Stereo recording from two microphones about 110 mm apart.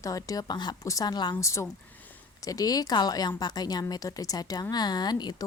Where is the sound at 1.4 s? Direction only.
25° left (ahead or behind).